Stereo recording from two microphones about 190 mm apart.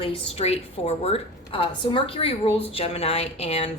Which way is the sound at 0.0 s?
35° left (ahead or behind).